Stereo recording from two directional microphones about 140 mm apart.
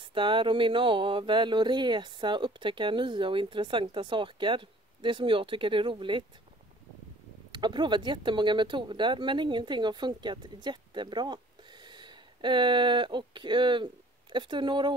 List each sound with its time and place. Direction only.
0.0 s speech: 35° right (ahead or behind)
7.5 s speech: 35° right (ahead or behind)